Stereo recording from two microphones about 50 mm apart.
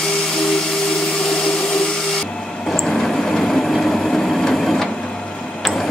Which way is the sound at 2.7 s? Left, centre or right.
Centre.